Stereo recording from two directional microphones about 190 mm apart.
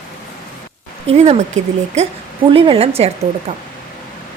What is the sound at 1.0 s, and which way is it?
A woman's voice, 35° right (ahead or behind).